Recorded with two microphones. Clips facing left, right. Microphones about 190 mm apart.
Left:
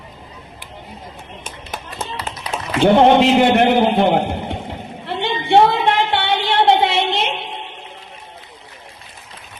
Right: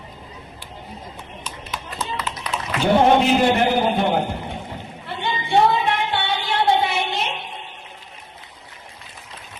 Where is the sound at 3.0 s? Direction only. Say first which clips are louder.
Left 3 dB; 75° left (ahead or behind).